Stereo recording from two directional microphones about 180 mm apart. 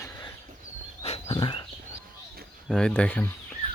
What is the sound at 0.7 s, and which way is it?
Dog, 40° right (ahead or behind).